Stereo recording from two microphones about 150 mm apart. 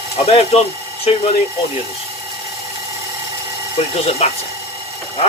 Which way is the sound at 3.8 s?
45° left (ahead or behind).